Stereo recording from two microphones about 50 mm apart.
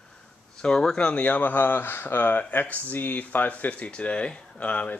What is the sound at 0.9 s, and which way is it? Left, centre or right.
Speech, left.